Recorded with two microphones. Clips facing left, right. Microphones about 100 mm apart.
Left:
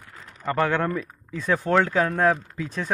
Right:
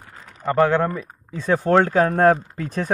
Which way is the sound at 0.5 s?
25° right (ahead or behind).